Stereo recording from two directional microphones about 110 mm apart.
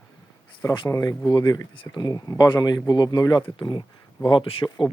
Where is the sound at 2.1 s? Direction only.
30° left (ahead or behind); by 4.7 s 55° left (ahead or behind).